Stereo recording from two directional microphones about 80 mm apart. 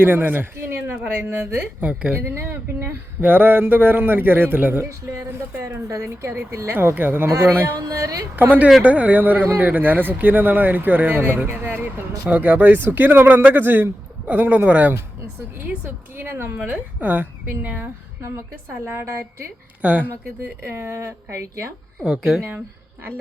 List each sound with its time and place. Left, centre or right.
0.0 s speech: right
2.1 s speech: right
5.6 s speech: right
6.7 s speech: right
7.3 s speech: right
7.8 s a sound: right
8.4 s speech: right
18.9 s speech: right
19.8 s speech: centre
20.6 s speech: right
22.0 s a woman's voice: centre